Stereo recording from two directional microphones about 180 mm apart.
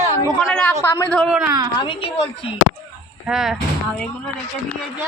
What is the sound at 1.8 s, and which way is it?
Speech, 30° left (ahead or behind).